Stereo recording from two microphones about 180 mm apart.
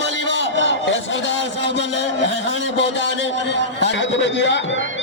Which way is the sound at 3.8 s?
85° left.